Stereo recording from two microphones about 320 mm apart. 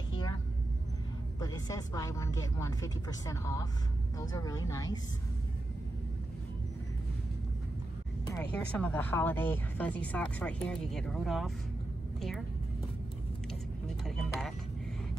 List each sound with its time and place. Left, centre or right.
1.4 s speech: centre
8.4 s speech: centre
14.0 s music: centre